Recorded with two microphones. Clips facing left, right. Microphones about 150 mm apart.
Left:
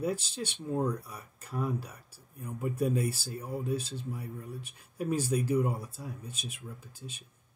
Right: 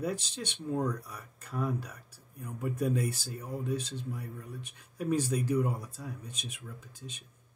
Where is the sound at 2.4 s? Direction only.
25° left (ahead or behind).